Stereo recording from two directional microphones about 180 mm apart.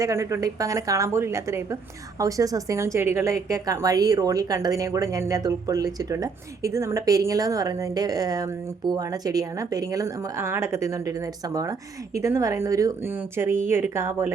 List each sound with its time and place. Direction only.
0.0 s a woman's voice: 15° right (ahead or behind)